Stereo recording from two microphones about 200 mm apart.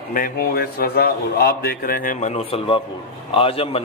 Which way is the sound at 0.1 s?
45° left (ahead or behind).